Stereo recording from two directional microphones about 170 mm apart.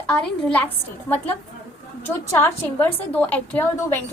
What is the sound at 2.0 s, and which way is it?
A woman's voice, 10° left (ahead or behind).